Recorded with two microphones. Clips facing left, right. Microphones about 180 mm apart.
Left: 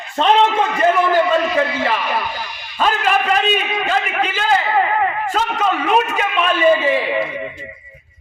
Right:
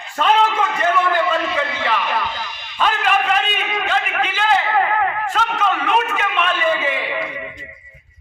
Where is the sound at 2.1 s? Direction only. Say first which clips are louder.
Left 1 dB; 10° left (ahead or behind).